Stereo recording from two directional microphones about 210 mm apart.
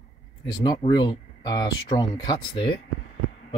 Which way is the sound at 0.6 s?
20° left (ahead or behind).